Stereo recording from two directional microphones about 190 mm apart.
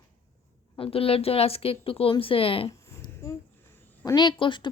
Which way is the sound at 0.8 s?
30° left (ahead or behind).